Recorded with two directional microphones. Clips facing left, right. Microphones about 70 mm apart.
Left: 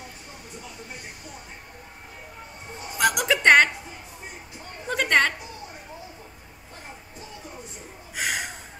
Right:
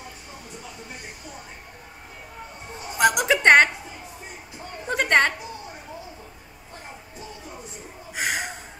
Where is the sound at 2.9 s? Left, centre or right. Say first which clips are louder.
Right 3 dB; centre.